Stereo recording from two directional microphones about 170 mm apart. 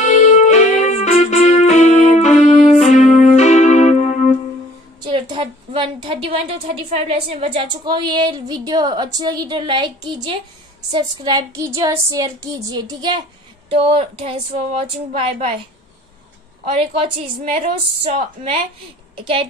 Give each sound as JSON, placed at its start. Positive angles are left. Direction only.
{"t": 0.3, "sound": "keyboard", "side_deg": 45}
{"t": 5.0, "sound": "a woman's voice", "side_deg": -30}
{"t": 16.7, "sound": "a woman's voice", "side_deg": -35}